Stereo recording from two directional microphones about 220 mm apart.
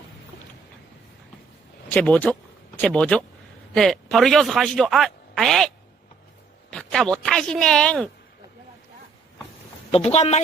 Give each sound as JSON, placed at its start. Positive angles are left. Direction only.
{"t": 1.9, "sound": "speech", "side_deg": 5}
{"t": 9.9, "sound": "speech", "side_deg": 30}